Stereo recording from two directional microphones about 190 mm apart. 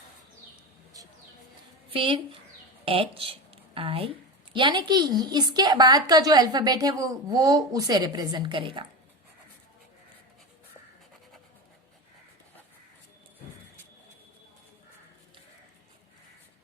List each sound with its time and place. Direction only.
1.9 s a woman's voice: 25° right (ahead or behind)